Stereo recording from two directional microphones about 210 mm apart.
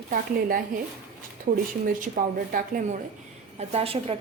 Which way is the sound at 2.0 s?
40° right (ahead or behind).